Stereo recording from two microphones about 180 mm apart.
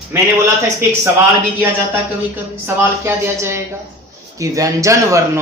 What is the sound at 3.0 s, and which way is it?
A man's voice, 15° right (ahead or behind).